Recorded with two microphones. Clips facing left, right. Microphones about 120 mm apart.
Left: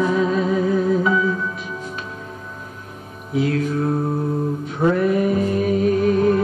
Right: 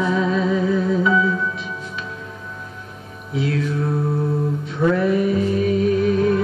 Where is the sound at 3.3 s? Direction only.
45° left (ahead or behind).